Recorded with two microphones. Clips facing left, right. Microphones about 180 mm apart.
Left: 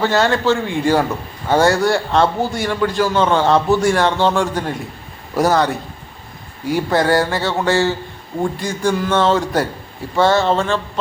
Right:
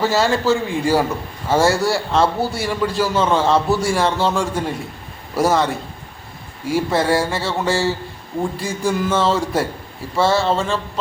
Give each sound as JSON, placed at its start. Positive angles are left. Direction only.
{"t": 0.0, "sound": "speech", "side_deg": -5}